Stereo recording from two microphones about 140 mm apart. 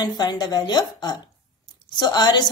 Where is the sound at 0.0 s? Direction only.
30° left (ahead or behind).